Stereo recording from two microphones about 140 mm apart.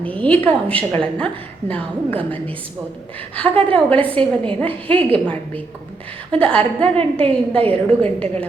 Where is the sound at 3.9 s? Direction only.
40° right (ahead or behind).